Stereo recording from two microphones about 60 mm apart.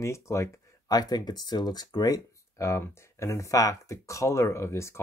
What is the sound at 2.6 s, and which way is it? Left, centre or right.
Speech, left.